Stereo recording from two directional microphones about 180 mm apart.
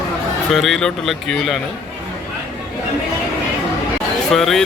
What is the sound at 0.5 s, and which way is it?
Speech, centre (ahead or behind).